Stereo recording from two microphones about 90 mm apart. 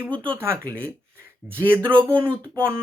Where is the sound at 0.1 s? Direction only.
70° right (ahead or behind).